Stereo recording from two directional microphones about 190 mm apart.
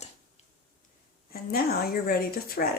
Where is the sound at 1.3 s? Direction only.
50° left (ahead or behind).